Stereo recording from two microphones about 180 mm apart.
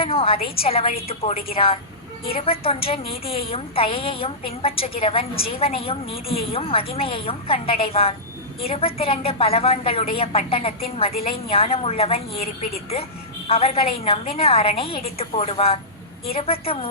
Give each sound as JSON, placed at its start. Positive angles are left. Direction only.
{"t": 0.0, "sound": "a woman's voice", "side_deg": 30}
{"t": 13.5, "sound": "a woman's voice", "side_deg": 35}